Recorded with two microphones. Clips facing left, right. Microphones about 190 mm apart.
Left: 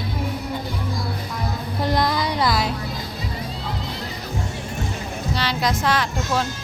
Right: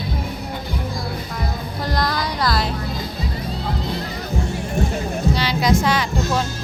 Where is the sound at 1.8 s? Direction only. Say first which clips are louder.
Left 2 dB; 20° left (ahead or behind).